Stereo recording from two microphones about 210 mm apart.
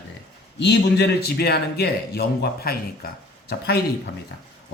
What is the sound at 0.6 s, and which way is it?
A man's voice, 55° left (ahead or behind).